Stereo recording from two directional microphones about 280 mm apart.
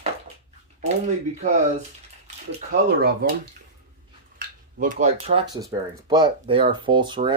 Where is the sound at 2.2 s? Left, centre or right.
Right.